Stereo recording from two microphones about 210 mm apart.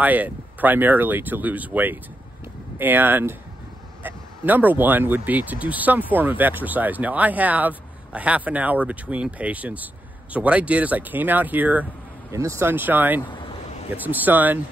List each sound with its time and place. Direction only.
0.0 s speech: 10° right (ahead or behind)
13.3 s a sound: 20° left (ahead or behind)
13.9 s speech: 10° right (ahead or behind)